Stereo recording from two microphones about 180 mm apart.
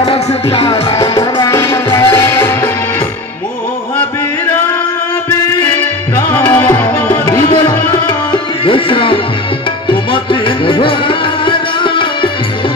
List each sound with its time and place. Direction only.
0.0 s music: 30° left (ahead or behind)
1.1 s music: 20° left (ahead or behind)
5.6 s music: 10° left (ahead or behind)
7.4 s tabla: 30° left (ahead or behind)
7.7 s tabla: 10° left (ahead or behind)
8.6 s tabla: 30° left (ahead or behind)
10.1 s music: 30° left (ahead or behind)